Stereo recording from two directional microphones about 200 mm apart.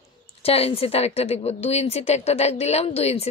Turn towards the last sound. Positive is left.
turn(degrees=30)  # may be behind; listen again after turning